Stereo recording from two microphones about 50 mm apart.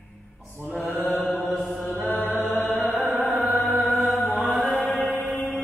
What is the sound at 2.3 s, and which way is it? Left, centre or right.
Music, left.